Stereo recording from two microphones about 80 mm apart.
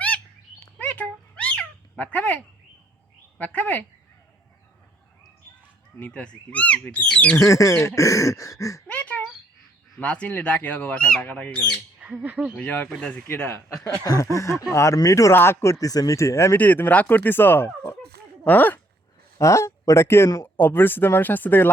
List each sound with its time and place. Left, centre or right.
0.8 s cat: centre
3.3 s speech: centre
6.0 s speech: centre
7.3 s speech: left
8.9 s a sound: centre
10.0 s speech: centre
11.9 s speech: centre
12.5 s speech: centre
13.2 s speech: left
14.0 s speech: left
15.3 s speech: left
16.6 s speech: left
19.4 s speech: left